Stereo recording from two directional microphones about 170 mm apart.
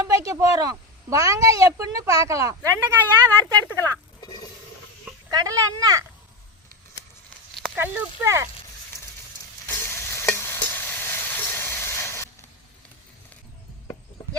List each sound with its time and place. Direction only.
0.0 s speech: 20° right (ahead or behind)
5.3 s speech: 20° right (ahead or behind)
7.8 s speech: 15° right (ahead or behind)
9.6 s stir: 15° left (ahead or behind)